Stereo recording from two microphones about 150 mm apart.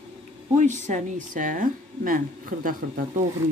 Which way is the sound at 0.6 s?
55° right (ahead or behind).